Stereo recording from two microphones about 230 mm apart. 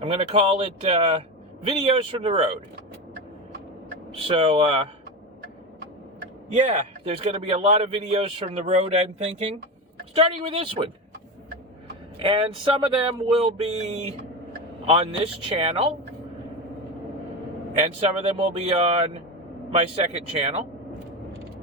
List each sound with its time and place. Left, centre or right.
0.0 s a man's voice: right
4.3 s a man's voice: right
6.5 s a man's voice: right
12.2 s a man's voice: right
18.3 s a man's voice: right